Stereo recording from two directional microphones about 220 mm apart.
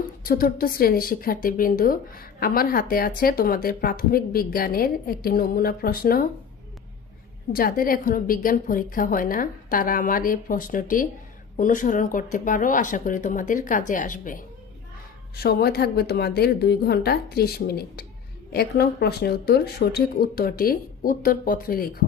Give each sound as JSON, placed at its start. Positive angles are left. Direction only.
{"t": 0.2, "sound": "speech", "side_deg": 40}
{"t": 7.5, "sound": "speech", "side_deg": 40}